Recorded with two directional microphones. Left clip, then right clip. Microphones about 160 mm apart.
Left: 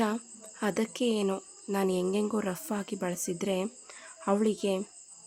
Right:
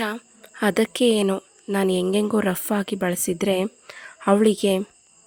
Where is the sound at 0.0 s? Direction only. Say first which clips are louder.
Right 4 dB; 30° right (ahead or behind).